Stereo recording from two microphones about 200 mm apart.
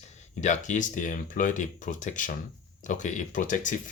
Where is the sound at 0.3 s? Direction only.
35° left (ahead or behind).